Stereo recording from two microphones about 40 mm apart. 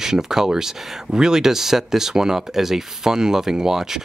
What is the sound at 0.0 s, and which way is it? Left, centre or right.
Speech, centre.